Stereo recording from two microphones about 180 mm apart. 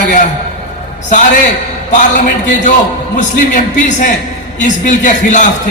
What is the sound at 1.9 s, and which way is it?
A man's voice, 45° left (ahead or behind).